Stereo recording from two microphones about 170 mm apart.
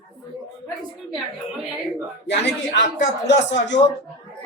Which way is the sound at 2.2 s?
90° left.